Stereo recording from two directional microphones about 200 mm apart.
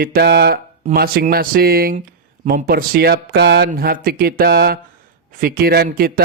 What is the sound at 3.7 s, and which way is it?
Speech, 45° right (ahead or behind).